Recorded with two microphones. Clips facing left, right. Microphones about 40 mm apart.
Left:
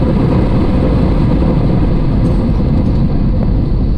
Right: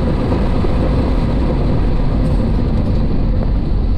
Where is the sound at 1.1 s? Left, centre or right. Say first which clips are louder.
Left 5 dB; left.